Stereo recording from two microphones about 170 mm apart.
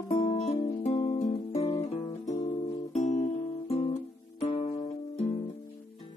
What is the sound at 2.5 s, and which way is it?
Music, 45° left (ahead or behind).